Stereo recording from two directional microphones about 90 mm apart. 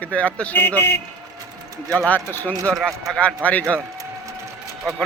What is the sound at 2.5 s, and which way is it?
Speech, 35° right (ahead or behind).